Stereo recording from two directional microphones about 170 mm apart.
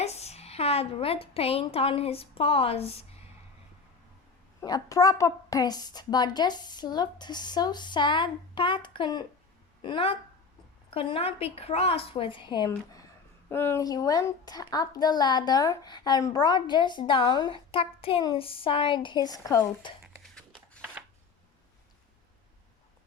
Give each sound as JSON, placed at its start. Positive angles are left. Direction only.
{"t": 0.0, "sound": "a woman's voice", "side_deg": 40}
{"t": 4.6, "sound": "a child's voice", "side_deg": 20}
{"t": 20.3, "sound": "a sound", "side_deg": 5}